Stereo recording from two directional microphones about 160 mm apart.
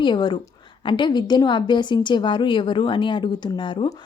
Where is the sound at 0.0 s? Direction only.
30° left (ahead or behind).